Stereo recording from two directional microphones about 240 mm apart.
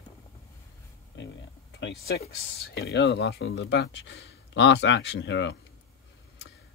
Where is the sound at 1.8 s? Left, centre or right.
Left.